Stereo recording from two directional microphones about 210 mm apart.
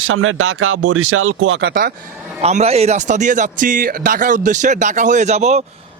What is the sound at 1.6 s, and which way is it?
Speech, 45° right (ahead or behind).